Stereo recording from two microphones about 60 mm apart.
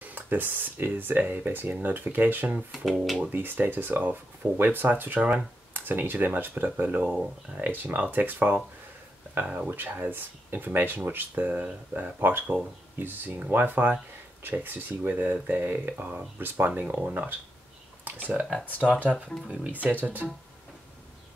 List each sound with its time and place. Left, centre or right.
0.0 s speech: right
2.7 s speech: centre
3.2 s speech: right
10.1 s speech: right
19.4 s speech: centre
19.8 s speech: right